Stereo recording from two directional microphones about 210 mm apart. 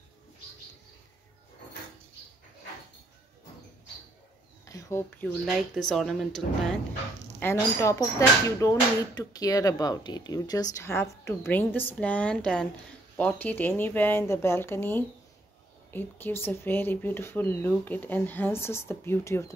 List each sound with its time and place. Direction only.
4.6 s speech: 15° left (ahead or behind)
5.4 s speech: centre (ahead or behind)
7.3 s speech: 15° left (ahead or behind)